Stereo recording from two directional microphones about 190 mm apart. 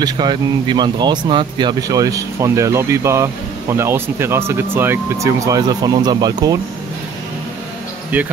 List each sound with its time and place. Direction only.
0.0 s speech: 20° right (ahead or behind)